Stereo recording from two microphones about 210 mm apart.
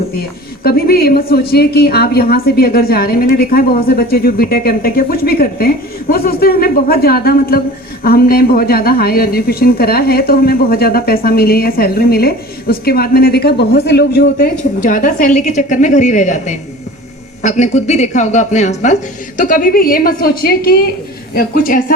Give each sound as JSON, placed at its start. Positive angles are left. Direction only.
{"t": 0.6, "sound": "a woman's voice", "side_deg": 45}